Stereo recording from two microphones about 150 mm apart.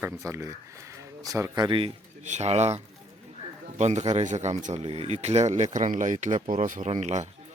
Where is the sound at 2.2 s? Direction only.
50° right (ahead or behind).